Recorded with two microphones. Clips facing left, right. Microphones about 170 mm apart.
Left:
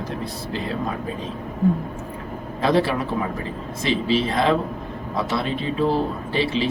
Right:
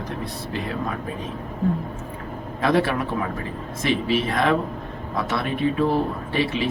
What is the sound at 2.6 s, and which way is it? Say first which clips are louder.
A man's voice: left 1 dB; 30° left (ahead or behind).